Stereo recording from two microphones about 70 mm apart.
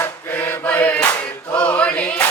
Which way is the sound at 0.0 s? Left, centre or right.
Left.